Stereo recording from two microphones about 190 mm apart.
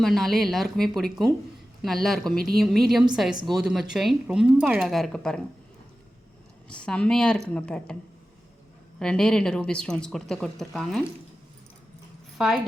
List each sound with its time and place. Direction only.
0.0 s speech: centre (ahead or behind)
2.3 s speech: 50° right (ahead or behind)
2.6 s speech: centre (ahead or behind)
6.7 s speech: 5° left (ahead or behind)
9.0 s speech: 5° left (ahead or behind)
12.4 s speech: centre (ahead or behind)